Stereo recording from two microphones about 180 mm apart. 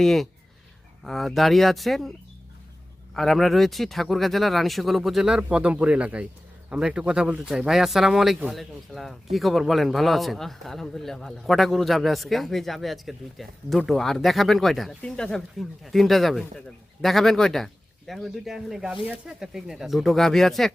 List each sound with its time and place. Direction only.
0.0 s a man's voice: centre (ahead or behind)
3.2 s a man's voice: centre (ahead or behind)